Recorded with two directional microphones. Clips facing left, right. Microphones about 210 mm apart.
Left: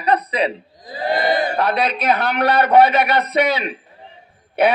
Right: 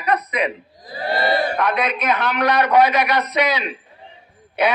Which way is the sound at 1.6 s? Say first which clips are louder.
Left 2 dB; 30° left (ahead or behind).